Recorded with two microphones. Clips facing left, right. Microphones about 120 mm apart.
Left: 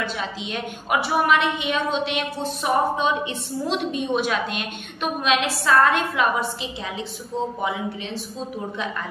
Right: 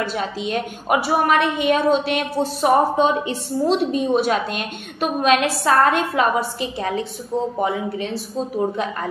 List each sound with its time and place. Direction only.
0.0 s a woman's voice: 45° right (ahead or behind)